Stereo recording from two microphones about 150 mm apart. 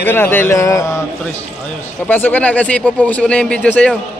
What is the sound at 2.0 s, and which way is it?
Speech, 15° left (ahead or behind).